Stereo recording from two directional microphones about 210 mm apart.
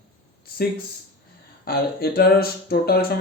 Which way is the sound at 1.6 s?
45° left (ahead or behind).